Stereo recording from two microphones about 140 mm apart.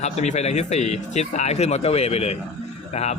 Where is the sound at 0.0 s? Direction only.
50° left (ahead or behind).